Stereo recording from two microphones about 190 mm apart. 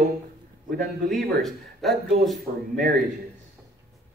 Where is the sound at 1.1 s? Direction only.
Centre (ahead or behind).